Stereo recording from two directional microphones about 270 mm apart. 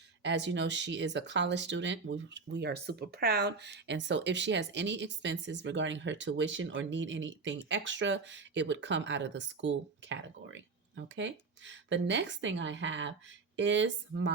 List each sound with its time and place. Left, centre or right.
0.2 s speech: right